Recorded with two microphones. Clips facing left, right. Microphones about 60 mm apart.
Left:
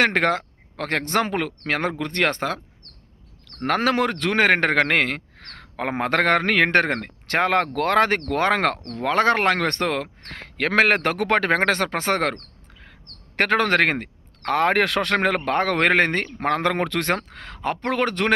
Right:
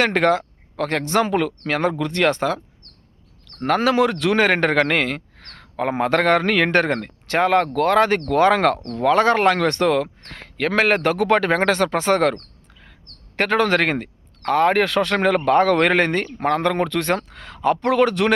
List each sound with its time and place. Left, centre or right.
0.0 s a man's voice: left
3.7 s a man's voice: left
12.8 s bird: left
14.4 s a man's voice: left